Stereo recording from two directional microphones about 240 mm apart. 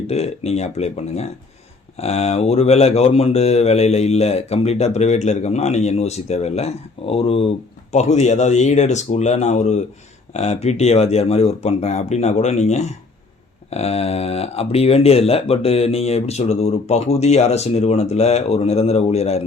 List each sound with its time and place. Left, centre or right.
0.1 s speech: left